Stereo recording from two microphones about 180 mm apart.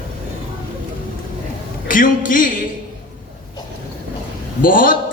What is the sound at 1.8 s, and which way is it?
Speech, 50° left (ahead or behind).